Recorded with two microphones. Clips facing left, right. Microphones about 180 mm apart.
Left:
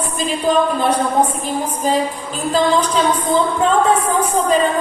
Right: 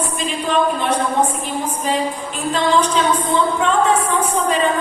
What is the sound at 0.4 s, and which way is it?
Speech, 35° left (ahead or behind).